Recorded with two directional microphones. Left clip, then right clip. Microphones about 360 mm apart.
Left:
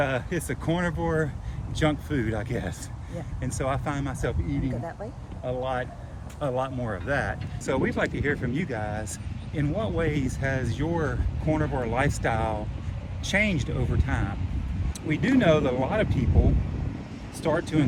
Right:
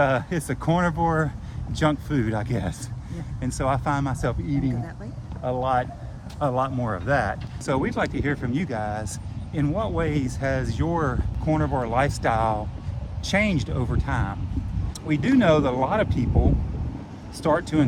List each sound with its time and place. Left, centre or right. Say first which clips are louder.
0.0 s speech: right 5 dB; centre
17.4 s speech: right 4 dB; centre